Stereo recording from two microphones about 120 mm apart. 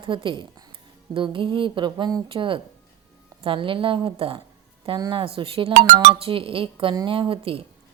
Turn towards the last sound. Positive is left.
turn(degrees=-50)  # may be behind; listen again after turning